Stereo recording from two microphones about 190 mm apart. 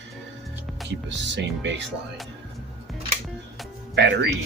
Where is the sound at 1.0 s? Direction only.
70° right (ahead or behind).